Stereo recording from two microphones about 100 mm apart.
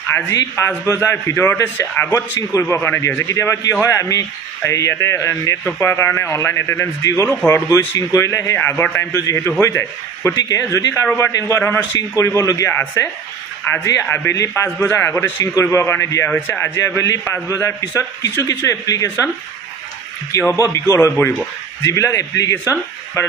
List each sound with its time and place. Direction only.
0.1 s a man's voice: 25° left (ahead or behind)
3.3 s a man's voice: 30° left (ahead or behind)
8.5 s a man's voice: 20° left (ahead or behind)
16.3 s a man's voice: 20° left (ahead or behind)
20.3 s a man's voice: 30° left (ahead or behind)